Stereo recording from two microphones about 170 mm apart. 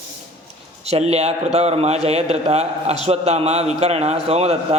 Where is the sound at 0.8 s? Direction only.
40° right (ahead or behind).